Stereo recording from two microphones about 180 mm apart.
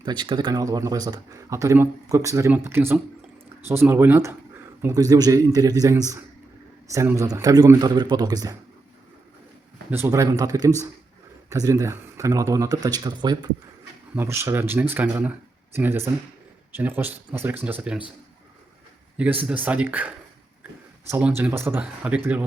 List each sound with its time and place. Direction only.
0.0 s speech: 25° right (ahead or behind)
9.9 s speech: 15° right (ahead or behind)
19.1 s speech: 10° right (ahead or behind)
21.1 s speech: 10° right (ahead or behind)